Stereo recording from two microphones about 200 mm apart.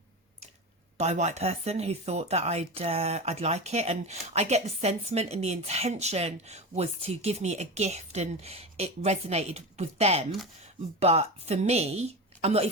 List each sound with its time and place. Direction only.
0.9 s speech: 35° right (ahead or behind)